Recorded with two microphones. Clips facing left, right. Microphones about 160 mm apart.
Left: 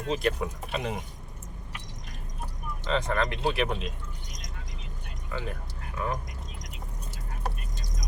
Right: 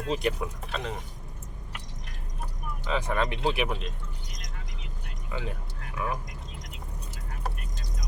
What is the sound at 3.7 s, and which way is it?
Speech, centre (ahead or behind).